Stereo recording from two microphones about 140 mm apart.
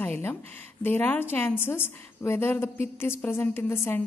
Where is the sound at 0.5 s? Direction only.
15° left (ahead or behind).